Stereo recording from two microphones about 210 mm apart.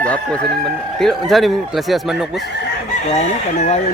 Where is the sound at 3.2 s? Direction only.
30° left (ahead or behind).